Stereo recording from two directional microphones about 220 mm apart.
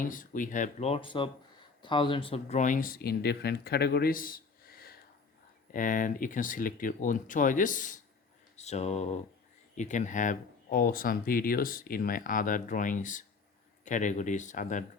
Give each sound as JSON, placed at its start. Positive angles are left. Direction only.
{"t": 0.0, "sound": "speech", "side_deg": 40}
{"t": 8.5, "sound": "mantra", "side_deg": 30}
{"t": 9.7, "sound": "speech", "side_deg": 35}